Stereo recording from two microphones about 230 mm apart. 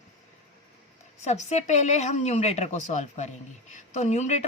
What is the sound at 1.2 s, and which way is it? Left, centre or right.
A woman's voice, left.